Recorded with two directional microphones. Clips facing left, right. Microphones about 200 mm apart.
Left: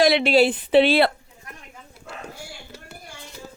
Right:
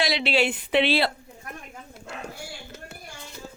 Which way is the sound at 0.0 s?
50° left (ahead or behind).